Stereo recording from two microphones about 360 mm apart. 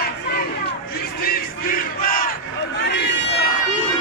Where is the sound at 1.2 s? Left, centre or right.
Left.